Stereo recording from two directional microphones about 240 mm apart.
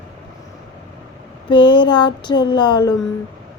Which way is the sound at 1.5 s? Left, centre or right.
Centre.